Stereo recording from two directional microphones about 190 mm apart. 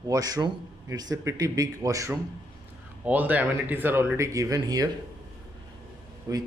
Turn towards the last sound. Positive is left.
turn(degrees=-15)  # may be behind; listen again after turning